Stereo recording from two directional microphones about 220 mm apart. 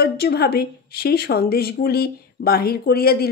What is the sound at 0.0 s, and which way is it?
A woman's voice, 45° left (ahead or behind).